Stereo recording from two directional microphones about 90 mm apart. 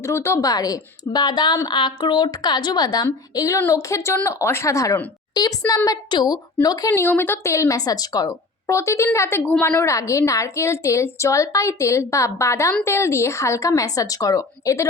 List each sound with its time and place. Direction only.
0.0 s a woman's voice: 30° left (ahead or behind)
5.3 s a woman's voice: 45° left (ahead or behind)
6.9 s a woman's voice: 25° left (ahead or behind)